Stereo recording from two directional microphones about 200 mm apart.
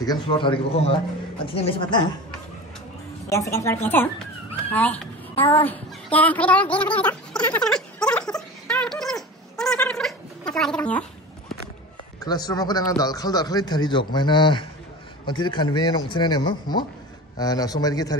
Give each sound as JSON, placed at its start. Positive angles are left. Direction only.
{"t": 0.0, "sound": "a man's voice", "side_deg": 20}
{"t": 3.3, "sound": "a child's voice", "side_deg": 15}
{"t": 7.0, "sound": "a sound", "side_deg": 5}
{"t": 12.2, "sound": "a man's voice", "side_deg": 20}